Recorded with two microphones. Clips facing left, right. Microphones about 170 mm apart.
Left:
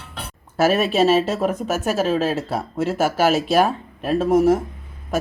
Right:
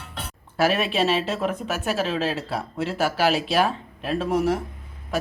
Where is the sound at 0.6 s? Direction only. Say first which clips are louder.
Left 5 dB; 45° left (ahead or behind).